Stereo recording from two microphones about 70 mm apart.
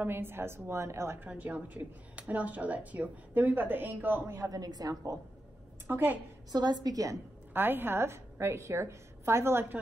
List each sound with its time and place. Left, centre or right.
0.0 s a woman's voice: right
4.4 s a woman's voice: right
5.9 s a woman's voice: right
6.5 s a woman's voice: right
7.5 s a woman's voice: right